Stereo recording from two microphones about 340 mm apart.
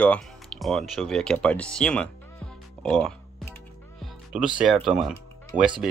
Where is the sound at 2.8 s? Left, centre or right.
Centre.